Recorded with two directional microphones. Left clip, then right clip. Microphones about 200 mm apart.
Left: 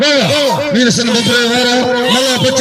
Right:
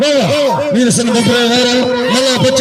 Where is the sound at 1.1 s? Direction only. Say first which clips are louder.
Even; 5° left (ahead or behind).